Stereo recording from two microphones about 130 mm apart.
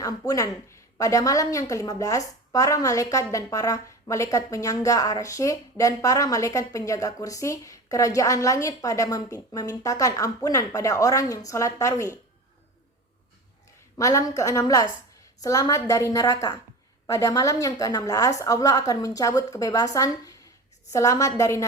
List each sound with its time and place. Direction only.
0.3 s a woman's voice: 25° left (ahead or behind)
13.9 s a woman's voice: 25° left (ahead or behind)